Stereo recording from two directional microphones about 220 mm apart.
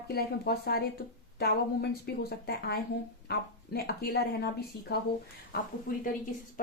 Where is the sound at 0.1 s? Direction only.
45° left (ahead or behind).